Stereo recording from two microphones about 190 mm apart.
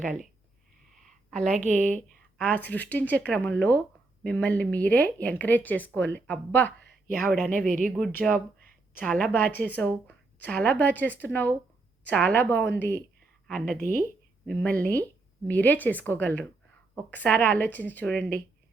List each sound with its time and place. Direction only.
0.0 s speech: 40° right (ahead or behind)
0.9 s a sound: centre (ahead or behind)
1.5 s speech: 40° right (ahead or behind)
2.0 s speech: 10° left (ahead or behind)
7.7 s speech: 45° right (ahead or behind)
7.9 s speech: 5° left (ahead or behind)
13.7 s speech: 45° right (ahead or behind)
14.4 s speech: 5° left (ahead or behind)